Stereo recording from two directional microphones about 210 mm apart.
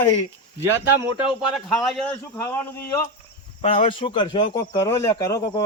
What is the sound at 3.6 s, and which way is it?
A man's voice, 25° left (ahead or behind).